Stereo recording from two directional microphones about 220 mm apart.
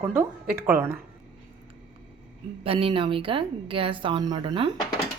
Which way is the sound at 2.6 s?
25° right (ahead or behind).